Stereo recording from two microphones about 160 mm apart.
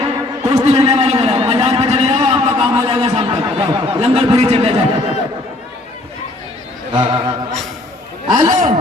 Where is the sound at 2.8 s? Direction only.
30° right (ahead or behind).